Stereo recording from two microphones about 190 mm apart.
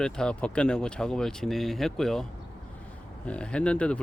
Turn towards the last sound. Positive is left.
turn(degrees=5)  # may be behind; listen again after turning